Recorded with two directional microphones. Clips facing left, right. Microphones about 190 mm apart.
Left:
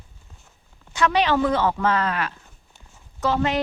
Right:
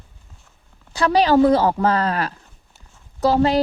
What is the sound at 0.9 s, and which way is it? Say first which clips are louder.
Speech: right 5 dB; 35° right (ahead or behind).